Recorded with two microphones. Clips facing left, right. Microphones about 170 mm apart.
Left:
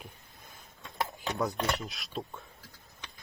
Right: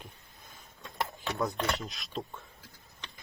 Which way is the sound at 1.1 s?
15° left (ahead or behind).